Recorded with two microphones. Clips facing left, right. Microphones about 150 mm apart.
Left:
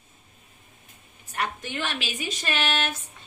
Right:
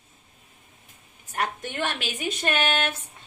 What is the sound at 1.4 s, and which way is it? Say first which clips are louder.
A woman's voice: right 2 dB; 50° right (ahead or behind).